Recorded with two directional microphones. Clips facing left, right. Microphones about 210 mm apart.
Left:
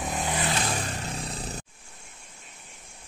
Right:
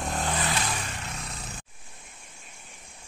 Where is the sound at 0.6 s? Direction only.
35° left (ahead or behind).